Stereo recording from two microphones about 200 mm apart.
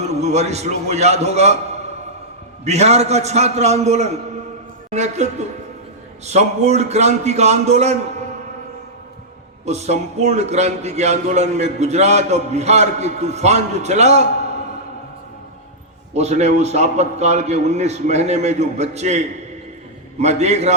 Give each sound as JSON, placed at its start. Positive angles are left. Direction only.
{"t": 0.0, "sound": "a man's voice", "side_deg": -35}
{"t": 9.6, "sound": "a man's voice", "side_deg": -35}
{"t": 16.1, "sound": "a man's voice", "side_deg": -35}
{"t": 20.2, "sound": "a man's voice", "side_deg": -35}